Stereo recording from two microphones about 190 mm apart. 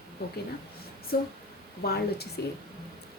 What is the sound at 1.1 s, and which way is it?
A woman's voice, 55° left (ahead or behind).